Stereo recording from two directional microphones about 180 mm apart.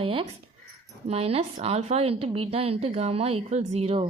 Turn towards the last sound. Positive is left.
turn(degrees=-30)  # may be behind; listen again after turning